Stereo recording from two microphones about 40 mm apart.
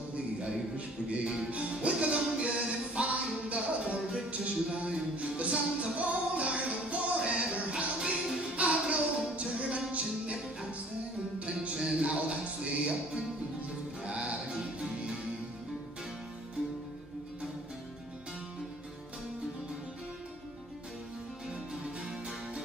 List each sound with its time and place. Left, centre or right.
0.4 s music: right
14.5 s music: right